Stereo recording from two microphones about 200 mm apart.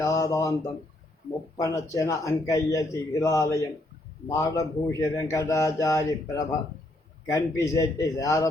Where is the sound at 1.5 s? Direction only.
15° left (ahead or behind).